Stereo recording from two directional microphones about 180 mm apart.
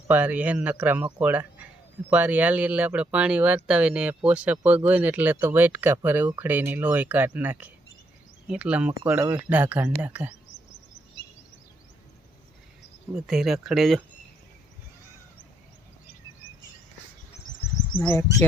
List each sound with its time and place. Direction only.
0.1 s speech: 10° right (ahead or behind)
13.1 s speech: centre (ahead or behind)
18.0 s speech: 15° left (ahead or behind)